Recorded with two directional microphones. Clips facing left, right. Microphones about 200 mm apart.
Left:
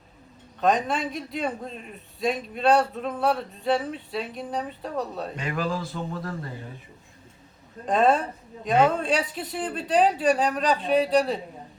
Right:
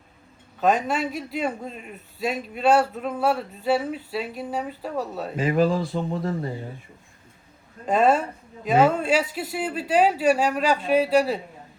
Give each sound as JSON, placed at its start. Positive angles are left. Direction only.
{"t": 0.6, "sound": "a man's voice", "side_deg": 0}
{"t": 6.1, "sound": "speech", "side_deg": -25}
{"t": 7.9, "sound": "a man's voice", "side_deg": 0}